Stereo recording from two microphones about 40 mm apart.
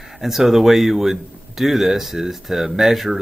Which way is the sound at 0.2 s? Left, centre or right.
Centre.